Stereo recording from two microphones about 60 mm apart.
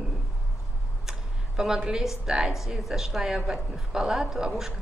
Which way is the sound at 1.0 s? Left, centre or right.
Centre.